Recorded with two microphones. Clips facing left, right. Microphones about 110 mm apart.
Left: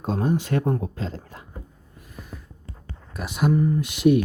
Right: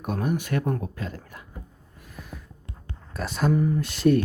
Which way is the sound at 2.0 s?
Centre (ahead or behind).